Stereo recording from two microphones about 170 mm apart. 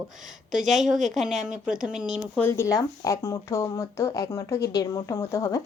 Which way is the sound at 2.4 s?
15° left (ahead or behind).